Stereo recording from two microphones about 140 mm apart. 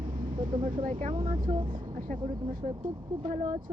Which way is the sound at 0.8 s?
75° right (ahead or behind).